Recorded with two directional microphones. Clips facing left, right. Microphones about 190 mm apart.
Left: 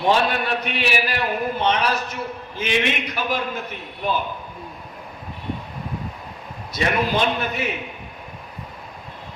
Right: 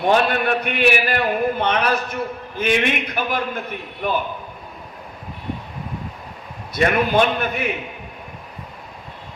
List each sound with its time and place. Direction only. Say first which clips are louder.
0.0 s a man's voice: right 2 dB; 55° right (ahead or behind)
6.7 s a man's voice: right 4 dB; 55° right (ahead or behind)